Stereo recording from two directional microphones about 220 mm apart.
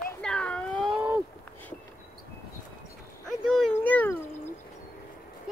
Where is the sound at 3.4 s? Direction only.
Centre (ahead or behind).